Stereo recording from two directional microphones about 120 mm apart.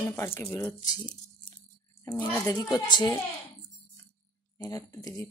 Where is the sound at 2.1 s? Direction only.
30° left (ahead or behind).